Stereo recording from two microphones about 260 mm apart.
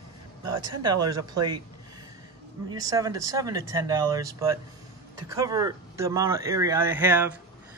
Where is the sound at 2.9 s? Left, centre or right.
Centre.